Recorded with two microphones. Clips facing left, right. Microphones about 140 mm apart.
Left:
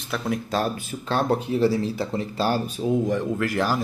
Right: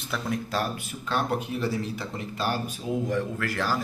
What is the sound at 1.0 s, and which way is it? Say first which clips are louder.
Speech: left 5 dB; 30° left (ahead or behind).